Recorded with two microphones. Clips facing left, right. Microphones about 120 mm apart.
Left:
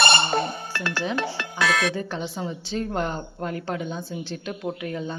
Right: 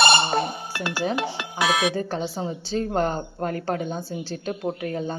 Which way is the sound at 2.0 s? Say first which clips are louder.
Right 3 dB; 40° right (ahead or behind).